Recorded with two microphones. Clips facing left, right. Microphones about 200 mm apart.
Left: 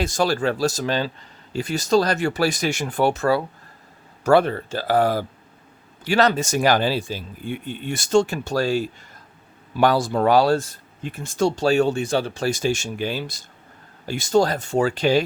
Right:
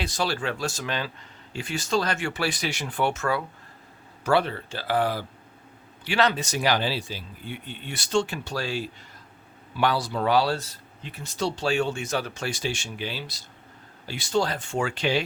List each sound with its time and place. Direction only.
0.0 s speech: 45° left (ahead or behind)
4.2 s speech: 45° left (ahead or behind)